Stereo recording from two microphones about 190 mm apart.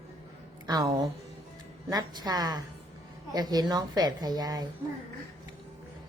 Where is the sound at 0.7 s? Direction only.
20° right (ahead or behind).